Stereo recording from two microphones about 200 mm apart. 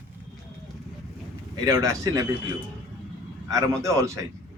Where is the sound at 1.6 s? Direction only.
15° right (ahead or behind).